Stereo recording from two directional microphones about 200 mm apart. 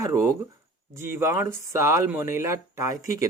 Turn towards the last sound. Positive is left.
turn(degrees=-15)  # may be behind; listen again after turning